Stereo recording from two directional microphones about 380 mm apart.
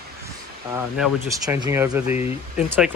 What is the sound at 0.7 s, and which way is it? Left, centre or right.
Speech, centre.